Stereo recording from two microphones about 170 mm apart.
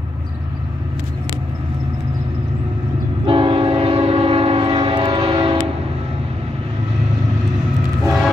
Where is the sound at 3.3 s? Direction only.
30° right (ahead or behind).